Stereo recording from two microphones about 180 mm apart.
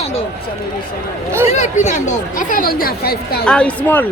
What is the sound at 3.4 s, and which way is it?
Speech, 5° left (ahead or behind).